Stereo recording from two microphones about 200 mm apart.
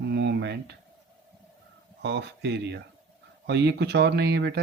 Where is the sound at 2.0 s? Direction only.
60° right (ahead or behind).